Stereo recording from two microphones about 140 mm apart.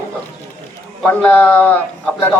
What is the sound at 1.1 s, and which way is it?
A man's voice, 10° left (ahead or behind).